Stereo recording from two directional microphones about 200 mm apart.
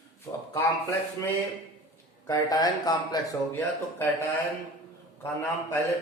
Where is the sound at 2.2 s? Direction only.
15° left (ahead or behind).